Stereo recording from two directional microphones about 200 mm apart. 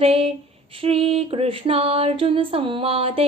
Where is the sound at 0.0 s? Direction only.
30° right (ahead or behind).